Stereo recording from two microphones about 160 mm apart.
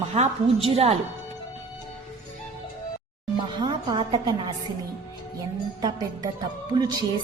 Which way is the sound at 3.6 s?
30° right (ahead or behind).